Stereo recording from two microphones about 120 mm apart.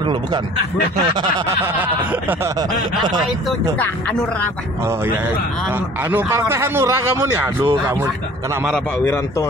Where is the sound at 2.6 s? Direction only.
35° right (ahead or behind).